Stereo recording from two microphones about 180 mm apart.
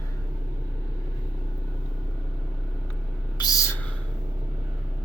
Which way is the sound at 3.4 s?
20° left (ahead or behind).